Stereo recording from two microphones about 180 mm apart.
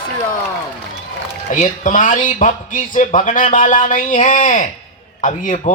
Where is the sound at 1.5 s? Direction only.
45° left (ahead or behind).